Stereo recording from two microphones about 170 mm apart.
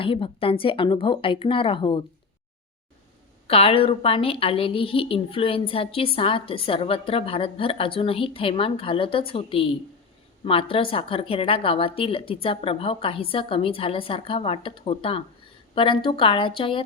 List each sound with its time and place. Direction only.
0.0 s a woman's voice: 30° left (ahead or behind)
3.4 s a woman's voice: 35° left (ahead or behind)